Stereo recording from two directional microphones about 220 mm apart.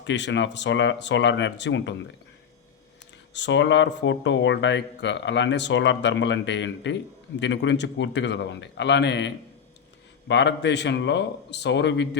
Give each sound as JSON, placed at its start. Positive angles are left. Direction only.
{"t": 0.0, "sound": "speech", "side_deg": 55}
{"t": 3.3, "sound": "speech", "side_deg": 55}